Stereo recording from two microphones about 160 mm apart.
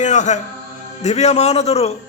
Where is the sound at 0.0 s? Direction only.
50° left (ahead or behind).